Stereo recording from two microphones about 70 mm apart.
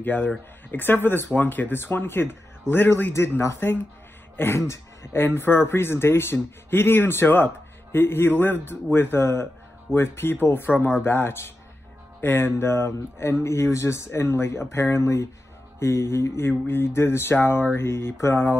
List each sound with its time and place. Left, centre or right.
0.0 s speech: left